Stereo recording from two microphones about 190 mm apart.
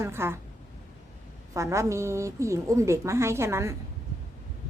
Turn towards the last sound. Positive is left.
turn(degrees=-15)  # may be behind; listen again after turning